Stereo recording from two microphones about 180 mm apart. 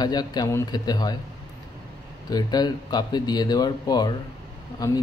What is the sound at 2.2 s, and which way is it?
A man's voice, 20° left (ahead or behind).